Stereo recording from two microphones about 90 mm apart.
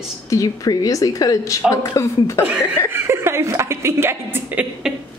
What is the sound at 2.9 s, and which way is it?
Speech, 30° right (ahead or behind).